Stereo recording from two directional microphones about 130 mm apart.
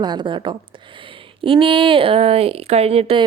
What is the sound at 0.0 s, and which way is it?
A woman's voice, 35° right (ahead or behind).